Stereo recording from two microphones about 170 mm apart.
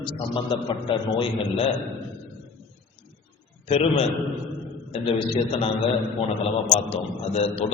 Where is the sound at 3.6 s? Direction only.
35° left (ahead or behind).